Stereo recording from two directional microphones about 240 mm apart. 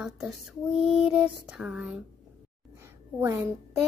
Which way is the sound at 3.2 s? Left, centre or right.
Centre.